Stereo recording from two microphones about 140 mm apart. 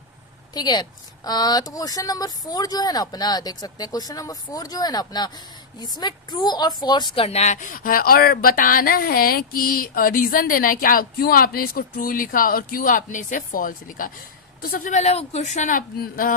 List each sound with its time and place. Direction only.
0.5 s a woman's voice: 30° left (ahead or behind)
7.3 s a sound: 50° left (ahead or behind); by 14.1 s 75° left (ahead or behind)
14.6 s speech: 80° left